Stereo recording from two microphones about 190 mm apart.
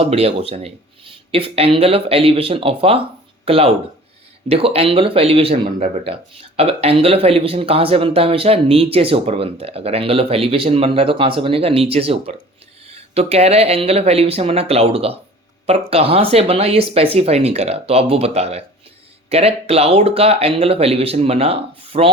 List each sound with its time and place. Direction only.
0.0 s speech: 30° right (ahead or behind)